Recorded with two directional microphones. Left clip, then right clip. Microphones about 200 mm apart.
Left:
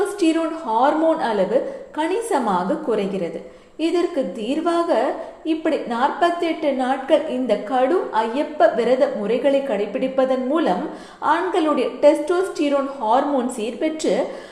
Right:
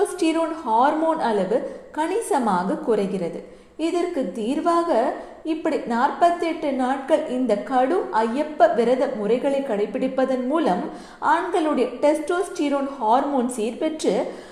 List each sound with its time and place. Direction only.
0.2 s a woman's voice: 25° right (ahead or behind)